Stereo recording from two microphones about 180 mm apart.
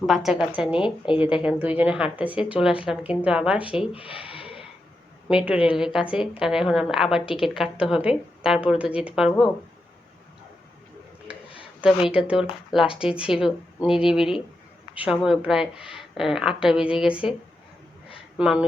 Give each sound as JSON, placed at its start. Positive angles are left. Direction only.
{"t": 0.0, "sound": "a woman's voice", "side_deg": 0}
{"t": 3.9, "sound": "a sound", "side_deg": 30}
{"t": 5.5, "sound": "a woman's voice", "side_deg": -5}
{"t": 11.8, "sound": "a woman's voice", "side_deg": -5}
{"t": 18.3, "sound": "a woman's voice", "side_deg": -5}